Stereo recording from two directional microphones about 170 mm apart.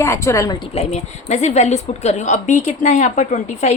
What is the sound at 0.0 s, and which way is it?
Speech, 15° left (ahead or behind).